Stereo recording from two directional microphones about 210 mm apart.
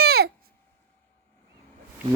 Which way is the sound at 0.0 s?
50° right (ahead or behind).